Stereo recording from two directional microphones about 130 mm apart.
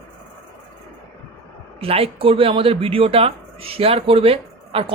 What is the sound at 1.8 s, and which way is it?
Speech, 50° right (ahead or behind).